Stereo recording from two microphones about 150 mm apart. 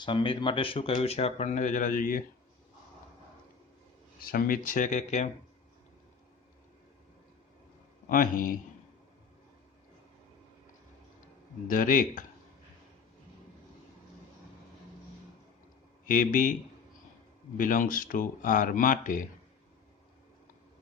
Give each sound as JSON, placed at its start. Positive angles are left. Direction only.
{"t": 0.0, "sound": "speech", "side_deg": 30}
{"t": 4.2, "sound": "speech", "side_deg": 75}
{"t": 8.0, "sound": "speech", "side_deg": 65}
{"t": 11.7, "sound": "speech", "side_deg": 65}
{"t": 16.0, "sound": "speech", "side_deg": 65}
{"t": 17.6, "sound": "speech", "side_deg": 65}